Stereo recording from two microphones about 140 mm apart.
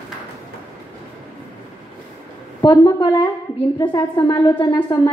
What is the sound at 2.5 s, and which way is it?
A woman's voice, 30° left (ahead or behind).